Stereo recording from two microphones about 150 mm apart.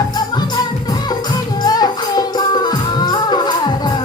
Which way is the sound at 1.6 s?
25° left (ahead or behind).